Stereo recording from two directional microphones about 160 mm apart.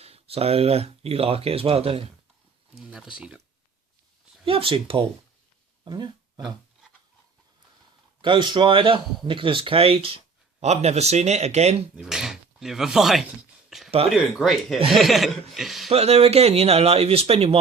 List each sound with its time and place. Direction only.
0.0 s speech: 40° right (ahead or behind)
2.7 s speech: 5° right (ahead or behind)
4.4 s speech: 35° right (ahead or behind)
8.2 s a man's voice: 30° right (ahead or behind)
11.9 s speech: 5° right (ahead or behind)
13.7 s a sound: centre (ahead or behind)
14.1 s speech: centre (ahead or behind)
15.9 s speech: 40° right (ahead or behind)